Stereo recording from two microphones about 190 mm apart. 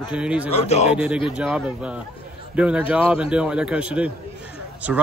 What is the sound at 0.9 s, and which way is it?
A man's voice, 5° right (ahead or behind).